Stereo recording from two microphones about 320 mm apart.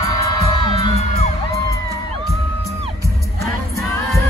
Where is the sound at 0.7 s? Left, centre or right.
Centre.